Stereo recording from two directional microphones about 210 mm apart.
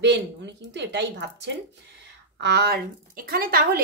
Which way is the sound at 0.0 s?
55° right (ahead or behind).